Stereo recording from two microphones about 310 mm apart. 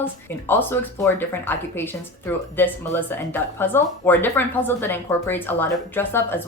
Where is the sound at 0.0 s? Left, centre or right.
Centre.